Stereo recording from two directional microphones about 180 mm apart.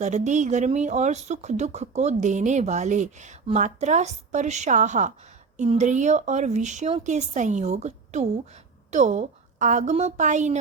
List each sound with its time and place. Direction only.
0.0 s speech: 40° right (ahead or behind)